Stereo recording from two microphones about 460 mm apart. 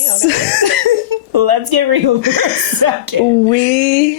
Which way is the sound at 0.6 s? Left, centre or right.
Right.